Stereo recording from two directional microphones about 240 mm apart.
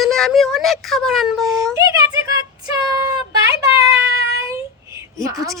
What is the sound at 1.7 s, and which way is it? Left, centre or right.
Speech, centre.